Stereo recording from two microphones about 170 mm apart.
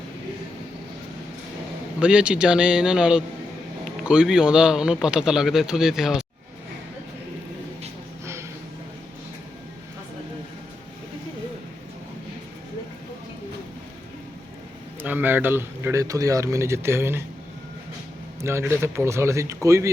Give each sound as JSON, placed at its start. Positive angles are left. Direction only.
{"t": 2.0, "sound": "speech", "side_deg": -5}
{"t": 15.0, "sound": "a sound", "side_deg": -10}
{"t": 18.4, "sound": "speech", "side_deg": -15}